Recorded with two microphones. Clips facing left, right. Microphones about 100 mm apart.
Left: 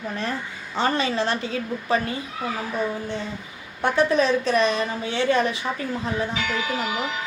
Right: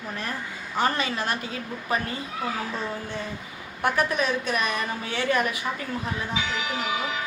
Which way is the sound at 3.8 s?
25° left (ahead or behind).